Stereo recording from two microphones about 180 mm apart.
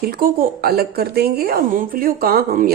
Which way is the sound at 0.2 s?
55° right (ahead or behind).